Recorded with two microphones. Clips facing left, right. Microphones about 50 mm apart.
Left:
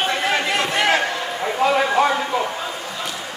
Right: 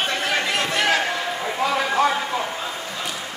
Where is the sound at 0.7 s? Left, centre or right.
Left.